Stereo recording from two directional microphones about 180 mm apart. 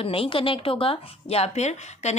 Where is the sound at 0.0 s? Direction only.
30° left (ahead or behind).